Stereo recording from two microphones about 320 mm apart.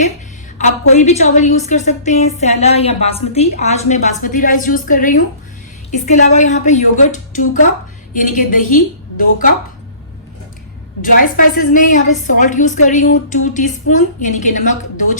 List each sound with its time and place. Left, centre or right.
0.9 s a woman's voice: left
11.0 s a woman's voice: left